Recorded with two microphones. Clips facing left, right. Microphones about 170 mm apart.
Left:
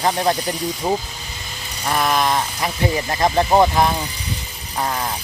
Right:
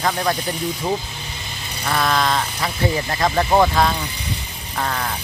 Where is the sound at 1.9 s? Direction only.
15° left (ahead or behind).